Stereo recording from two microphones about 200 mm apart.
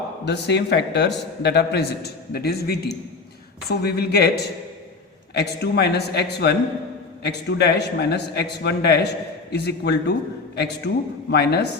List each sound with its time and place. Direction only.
0.3 s a man's voice: 60° left (ahead or behind)
5.3 s a man's voice: 55° left (ahead or behind)